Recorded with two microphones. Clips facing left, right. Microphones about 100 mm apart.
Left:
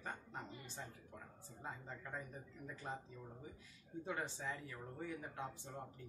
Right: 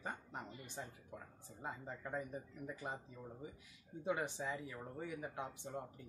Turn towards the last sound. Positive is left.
turn(degrees=-15)  # may be behind; listen again after turning